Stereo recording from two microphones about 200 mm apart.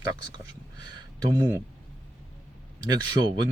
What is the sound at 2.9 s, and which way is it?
Speech, 20° right (ahead or behind).